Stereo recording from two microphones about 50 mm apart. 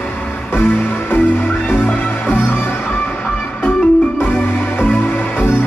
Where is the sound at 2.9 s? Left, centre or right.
Left.